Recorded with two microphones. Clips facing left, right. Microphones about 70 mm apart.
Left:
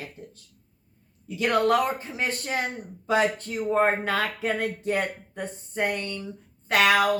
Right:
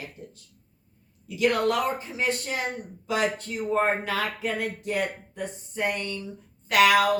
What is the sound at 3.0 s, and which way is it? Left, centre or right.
A woman's voice, left.